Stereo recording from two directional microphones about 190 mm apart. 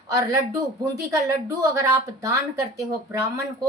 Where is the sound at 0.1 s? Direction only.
15° right (ahead or behind).